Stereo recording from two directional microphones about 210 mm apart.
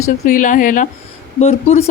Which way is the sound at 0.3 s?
40° left (ahead or behind).